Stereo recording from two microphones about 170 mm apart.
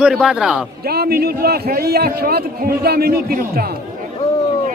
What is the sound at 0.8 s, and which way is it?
A man's voice, 65° right (ahead or behind).